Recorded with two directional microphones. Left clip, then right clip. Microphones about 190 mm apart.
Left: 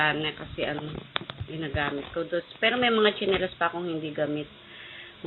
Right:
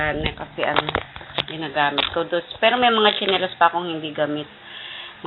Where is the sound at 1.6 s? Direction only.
30° left (ahead or behind).